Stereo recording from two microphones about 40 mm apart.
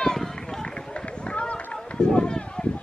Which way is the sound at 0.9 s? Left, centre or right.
Left.